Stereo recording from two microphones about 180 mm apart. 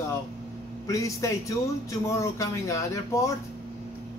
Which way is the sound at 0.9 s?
15° left (ahead or behind).